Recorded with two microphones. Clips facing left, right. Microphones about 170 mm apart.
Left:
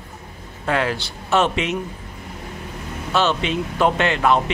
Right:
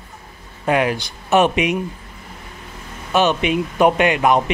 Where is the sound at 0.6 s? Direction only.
15° right (ahead or behind).